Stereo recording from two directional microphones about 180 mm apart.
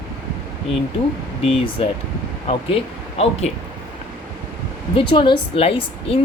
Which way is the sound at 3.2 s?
35° left (ahead or behind).